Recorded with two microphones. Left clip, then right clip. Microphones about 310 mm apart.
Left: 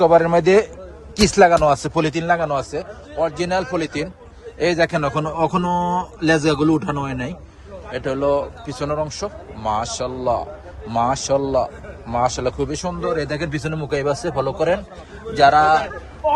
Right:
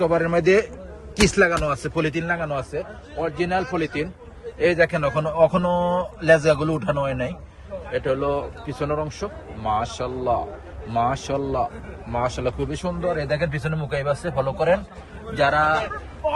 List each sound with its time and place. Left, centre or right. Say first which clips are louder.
0.0 s a man's voice: left 6 dB; centre